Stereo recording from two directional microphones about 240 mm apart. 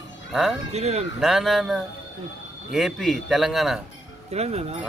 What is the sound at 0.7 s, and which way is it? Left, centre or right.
Speech, right.